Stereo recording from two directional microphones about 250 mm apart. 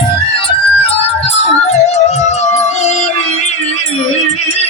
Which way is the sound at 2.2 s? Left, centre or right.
Left.